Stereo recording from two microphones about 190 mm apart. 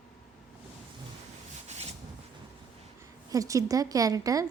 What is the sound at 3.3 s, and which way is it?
A woman's voice, 15° right (ahead or behind).